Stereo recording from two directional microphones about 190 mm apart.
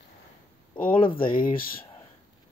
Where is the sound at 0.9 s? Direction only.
25° left (ahead or behind).